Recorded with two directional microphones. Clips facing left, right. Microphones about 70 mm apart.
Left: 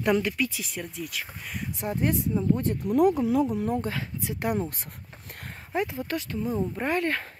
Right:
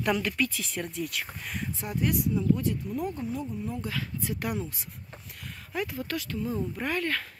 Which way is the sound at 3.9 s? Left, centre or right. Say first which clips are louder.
Left 1 dB; left.